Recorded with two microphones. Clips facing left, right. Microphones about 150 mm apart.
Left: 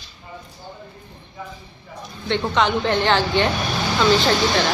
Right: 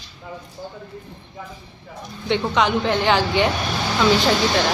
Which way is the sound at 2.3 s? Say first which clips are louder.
Right 1 dB; 10° right (ahead or behind).